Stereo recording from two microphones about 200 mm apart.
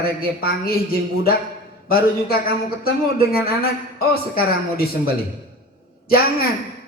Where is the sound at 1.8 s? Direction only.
50° left (ahead or behind).